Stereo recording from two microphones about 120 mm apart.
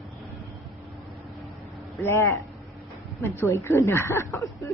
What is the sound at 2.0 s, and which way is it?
Speech, 20° left (ahead or behind).